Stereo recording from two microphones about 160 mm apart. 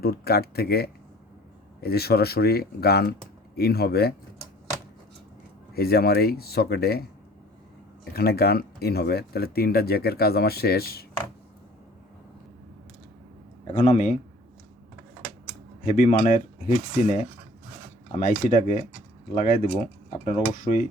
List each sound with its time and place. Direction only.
0.0 s speech: 75° left (ahead or behind)
5.7 s speech: 75° left (ahead or behind)
8.1 s speech: 75° left (ahead or behind)
13.7 s speech: 45° left (ahead or behind)
15.8 s speech: 50° left (ahead or behind)